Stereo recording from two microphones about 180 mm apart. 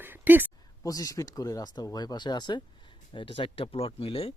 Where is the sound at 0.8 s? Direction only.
20° left (ahead or behind).